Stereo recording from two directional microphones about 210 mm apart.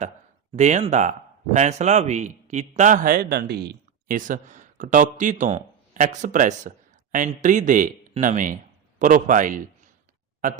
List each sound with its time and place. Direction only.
0.5 s a man's voice: 35° right (ahead or behind)